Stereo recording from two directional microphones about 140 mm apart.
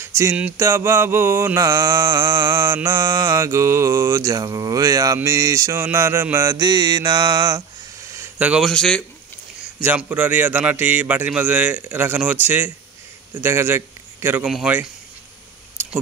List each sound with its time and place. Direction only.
0.0 s a sound: 20° right (ahead or behind)
0.4 s mantra: 15° right (ahead or behind)
8.4 s speech: 10° right (ahead or behind)
8.6 s a man's voice: 5° left (ahead or behind)
9.8 s a man's voice: 10° right (ahead or behind)